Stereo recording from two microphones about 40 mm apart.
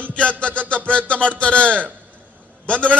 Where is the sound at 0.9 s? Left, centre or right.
Left.